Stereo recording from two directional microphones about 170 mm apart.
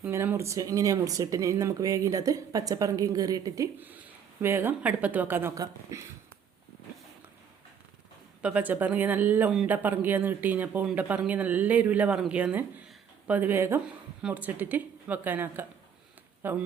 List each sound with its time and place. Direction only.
0.0 s speech: 15° right (ahead or behind)
8.4 s speech: 5° right (ahead or behind)